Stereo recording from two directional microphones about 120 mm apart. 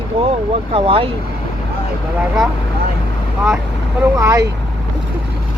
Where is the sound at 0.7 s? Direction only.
50° right (ahead or behind).